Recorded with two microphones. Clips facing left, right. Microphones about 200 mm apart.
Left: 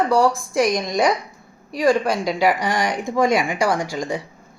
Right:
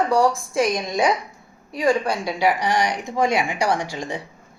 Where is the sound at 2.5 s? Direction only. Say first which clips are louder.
Even; 50° left (ahead or behind).